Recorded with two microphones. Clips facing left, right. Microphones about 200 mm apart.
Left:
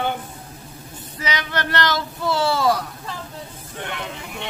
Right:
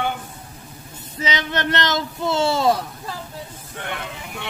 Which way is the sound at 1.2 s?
25° right (ahead or behind).